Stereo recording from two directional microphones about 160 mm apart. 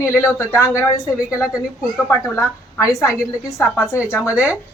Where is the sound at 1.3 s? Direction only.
5° right (ahead or behind).